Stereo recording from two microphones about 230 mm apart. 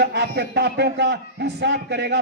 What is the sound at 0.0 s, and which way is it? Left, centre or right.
A man's voice, right.